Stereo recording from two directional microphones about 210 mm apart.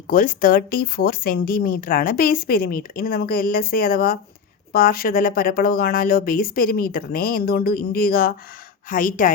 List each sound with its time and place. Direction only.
0.1 s a woman's voice: 40° left (ahead or behind)